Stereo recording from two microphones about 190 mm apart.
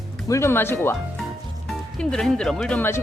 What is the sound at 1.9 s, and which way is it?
Speech, 5° left (ahead or behind).